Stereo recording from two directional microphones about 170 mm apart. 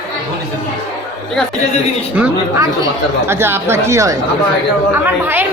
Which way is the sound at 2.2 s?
15° right (ahead or behind).